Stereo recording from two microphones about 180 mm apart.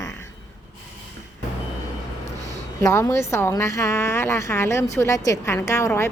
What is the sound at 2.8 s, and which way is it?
A woman's voice, 15° left (ahead or behind).